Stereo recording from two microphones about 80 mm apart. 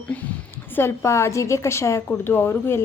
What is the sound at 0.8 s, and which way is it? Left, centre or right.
A woman's voice, left.